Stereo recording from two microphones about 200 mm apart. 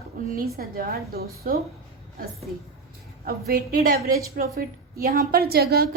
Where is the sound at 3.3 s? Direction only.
45° right (ahead or behind).